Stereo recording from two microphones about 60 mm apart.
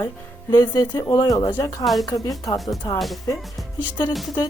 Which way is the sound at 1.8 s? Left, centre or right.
Centre.